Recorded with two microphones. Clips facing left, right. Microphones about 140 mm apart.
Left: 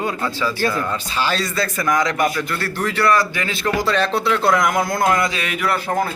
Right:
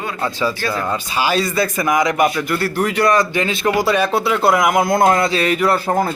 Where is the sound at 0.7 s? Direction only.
30° right (ahead or behind).